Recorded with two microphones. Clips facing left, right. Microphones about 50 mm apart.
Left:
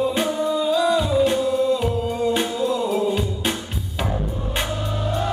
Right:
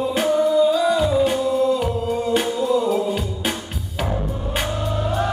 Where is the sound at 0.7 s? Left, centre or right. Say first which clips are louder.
Right 1 dB; centre.